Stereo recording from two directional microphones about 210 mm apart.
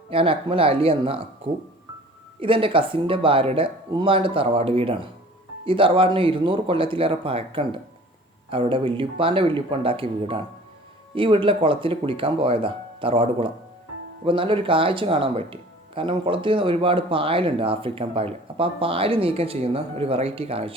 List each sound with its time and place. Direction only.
0.1 s speech: 25° right (ahead or behind)
2.4 s speech: 25° right (ahead or behind)